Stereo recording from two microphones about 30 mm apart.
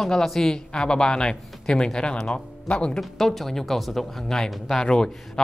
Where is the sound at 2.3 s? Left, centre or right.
Left.